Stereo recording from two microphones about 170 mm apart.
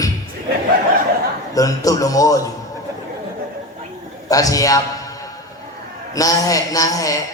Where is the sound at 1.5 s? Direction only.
20° left (ahead or behind).